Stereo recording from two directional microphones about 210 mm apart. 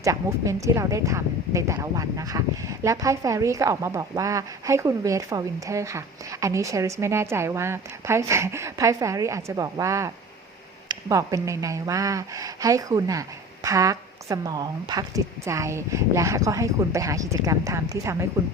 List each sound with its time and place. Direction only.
0.0 s speech: 15° right (ahead or behind)